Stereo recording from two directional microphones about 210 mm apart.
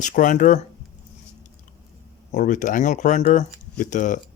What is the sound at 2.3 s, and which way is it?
Speech, 35° left (ahead or behind).